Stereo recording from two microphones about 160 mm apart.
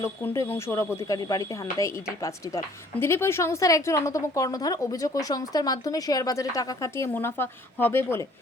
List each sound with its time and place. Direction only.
0.0 s speech: 15° left (ahead or behind)